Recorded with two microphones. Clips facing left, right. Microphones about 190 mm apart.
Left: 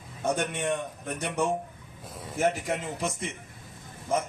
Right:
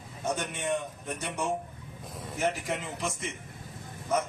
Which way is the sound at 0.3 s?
60° left (ahead or behind).